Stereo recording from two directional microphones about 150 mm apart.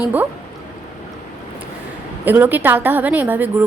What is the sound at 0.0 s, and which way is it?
Speech, 10° right (ahead or behind).